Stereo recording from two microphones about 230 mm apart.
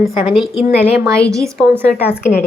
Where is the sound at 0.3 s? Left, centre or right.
Centre.